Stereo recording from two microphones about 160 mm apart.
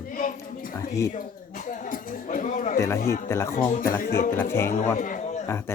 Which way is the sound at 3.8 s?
60° left (ahead or behind).